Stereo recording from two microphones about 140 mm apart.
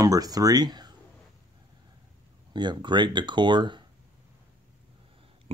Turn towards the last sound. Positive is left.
turn(degrees=-35)  # may be behind; listen again after turning